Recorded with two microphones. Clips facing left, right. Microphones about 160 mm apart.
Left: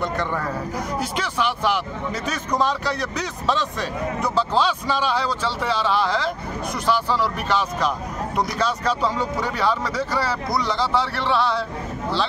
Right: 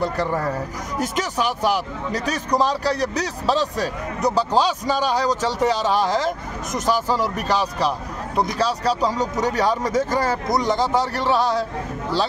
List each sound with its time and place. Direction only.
0.0 s a man's voice: 35° right (ahead or behind)